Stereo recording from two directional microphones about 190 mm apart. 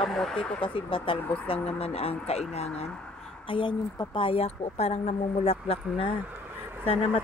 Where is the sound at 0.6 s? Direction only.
25° left (ahead or behind).